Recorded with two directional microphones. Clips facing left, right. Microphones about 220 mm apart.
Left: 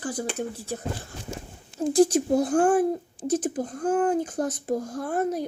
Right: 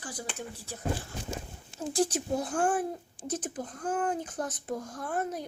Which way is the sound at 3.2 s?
10° left (ahead or behind).